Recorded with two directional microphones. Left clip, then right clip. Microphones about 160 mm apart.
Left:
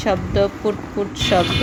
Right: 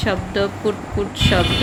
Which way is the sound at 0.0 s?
20° left (ahead or behind).